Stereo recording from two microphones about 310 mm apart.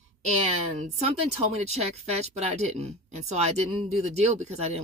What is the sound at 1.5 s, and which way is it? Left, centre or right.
Speech, right.